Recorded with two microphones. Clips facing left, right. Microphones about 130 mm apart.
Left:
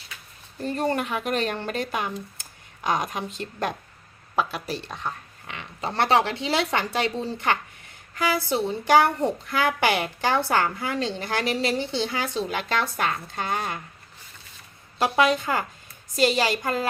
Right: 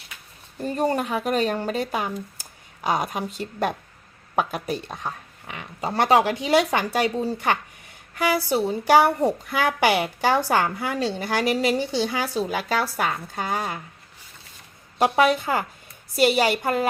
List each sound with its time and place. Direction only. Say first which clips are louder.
0.6 s a woman's voice: right 2 dB; 10° right (ahead or behind)
1.0 s speech: right 3 dB; 40° right (ahead or behind)
1.3 s a woman's voice: right 5 dB; 10° right (ahead or behind)
4.4 s speech: right 2 dB; 55° right (ahead or behind)
4.9 s a woman's voice: even; 10° right (ahead or behind)
15.1 s a woman's voice: even; 10° right (ahead or behind)